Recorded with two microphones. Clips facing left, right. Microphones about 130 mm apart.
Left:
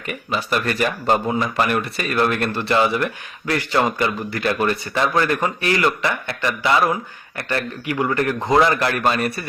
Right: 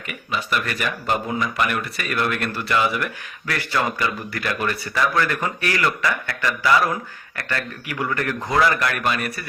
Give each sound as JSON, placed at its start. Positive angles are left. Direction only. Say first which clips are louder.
{"t": 0.1, "sound": "speech", "louder": "left 3 dB", "side_deg": 35}